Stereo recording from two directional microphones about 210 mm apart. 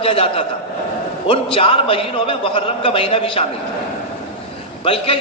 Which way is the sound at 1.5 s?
25° left (ahead or behind).